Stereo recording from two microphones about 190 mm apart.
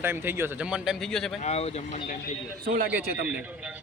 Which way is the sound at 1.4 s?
35° left (ahead or behind).